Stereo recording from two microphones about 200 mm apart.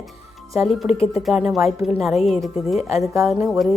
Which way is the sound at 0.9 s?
30° left (ahead or behind).